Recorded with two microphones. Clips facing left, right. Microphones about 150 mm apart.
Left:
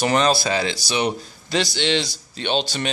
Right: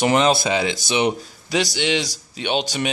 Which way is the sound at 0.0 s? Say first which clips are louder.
Right 2 dB; 20° right (ahead or behind).